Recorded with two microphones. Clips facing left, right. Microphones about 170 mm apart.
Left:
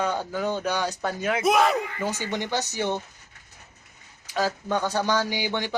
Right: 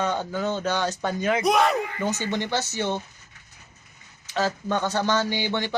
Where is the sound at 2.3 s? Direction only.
15° left (ahead or behind).